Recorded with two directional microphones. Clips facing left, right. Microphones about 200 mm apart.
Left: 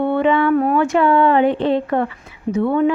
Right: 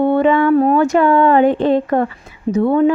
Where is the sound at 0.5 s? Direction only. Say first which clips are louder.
Right 3 dB; 35° right (ahead or behind).